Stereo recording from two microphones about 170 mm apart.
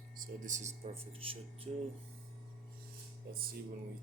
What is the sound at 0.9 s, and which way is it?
Speech, 35° right (ahead or behind).